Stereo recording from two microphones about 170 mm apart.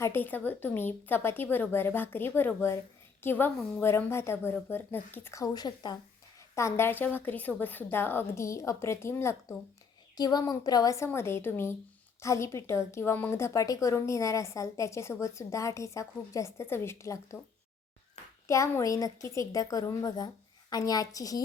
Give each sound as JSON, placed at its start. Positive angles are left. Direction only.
{"t": 0.0, "sound": "a woman's voice", "side_deg": 10}
{"t": 18.4, "sound": "a woman's voice", "side_deg": 20}